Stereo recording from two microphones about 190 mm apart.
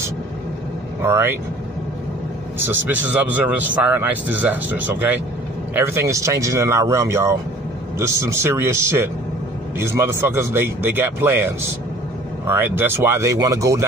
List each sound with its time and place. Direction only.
1.0 s a man's voice: 15° right (ahead or behind)
2.6 s a man's voice: 10° right (ahead or behind)